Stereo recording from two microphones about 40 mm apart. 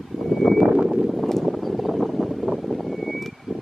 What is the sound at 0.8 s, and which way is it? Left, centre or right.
Vehicle, centre.